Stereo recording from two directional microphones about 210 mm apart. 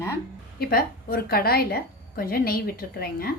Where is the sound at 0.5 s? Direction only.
45° left (ahead or behind).